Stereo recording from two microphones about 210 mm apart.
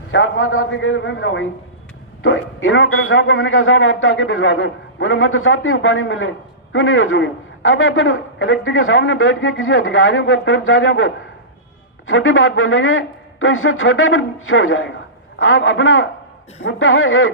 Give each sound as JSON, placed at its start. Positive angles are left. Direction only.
{"t": 0.1, "sound": "a man's voice", "side_deg": 70}